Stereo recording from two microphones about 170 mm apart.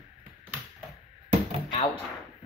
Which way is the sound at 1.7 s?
35° left (ahead or behind).